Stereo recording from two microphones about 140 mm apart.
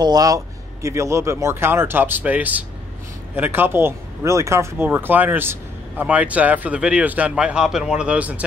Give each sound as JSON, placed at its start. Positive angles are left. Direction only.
{"t": 0.0, "sound": "a man's voice", "side_deg": -25}